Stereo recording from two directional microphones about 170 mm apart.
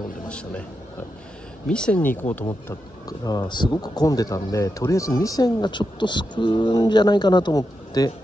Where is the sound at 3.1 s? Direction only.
25° left (ahead or behind).